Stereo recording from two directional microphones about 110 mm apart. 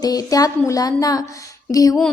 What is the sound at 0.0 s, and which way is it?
A woman's voice, 35° left (ahead or behind).